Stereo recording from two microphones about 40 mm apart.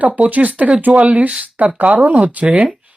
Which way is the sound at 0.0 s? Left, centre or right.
Right.